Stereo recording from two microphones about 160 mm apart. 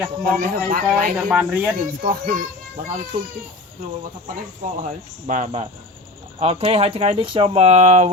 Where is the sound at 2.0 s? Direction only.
60° right (ahead or behind).